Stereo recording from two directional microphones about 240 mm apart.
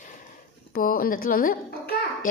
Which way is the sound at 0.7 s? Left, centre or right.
Left.